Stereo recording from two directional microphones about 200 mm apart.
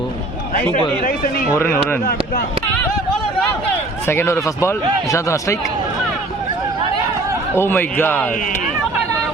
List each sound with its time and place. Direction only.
0.7 s speech: 45° left (ahead or behind)
1.5 s a man's voice: 10° left (ahead or behind)
4.0 s a man's voice: 10° left (ahead or behind)
7.5 s a man's voice: 10° left (ahead or behind)
8.3 s speech: 40° left (ahead or behind)